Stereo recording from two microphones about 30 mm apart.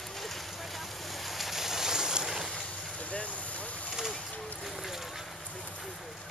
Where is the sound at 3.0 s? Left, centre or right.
Left.